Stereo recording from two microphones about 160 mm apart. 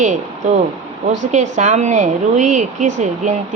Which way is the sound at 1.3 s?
50° right (ahead or behind).